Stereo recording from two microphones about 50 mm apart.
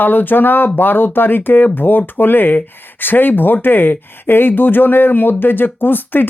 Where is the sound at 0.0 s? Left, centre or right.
Left.